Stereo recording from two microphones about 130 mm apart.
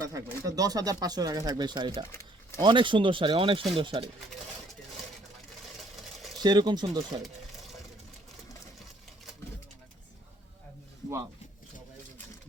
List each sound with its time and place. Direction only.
0.0 s speech: 25° right (ahead or behind)
6.4 s speech: 35° right (ahead or behind)